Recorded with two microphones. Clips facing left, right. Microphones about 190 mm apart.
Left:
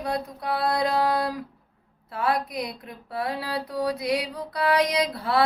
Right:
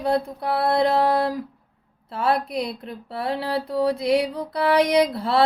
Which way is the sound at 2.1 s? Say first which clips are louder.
Right 3 dB; 25° right (ahead or behind).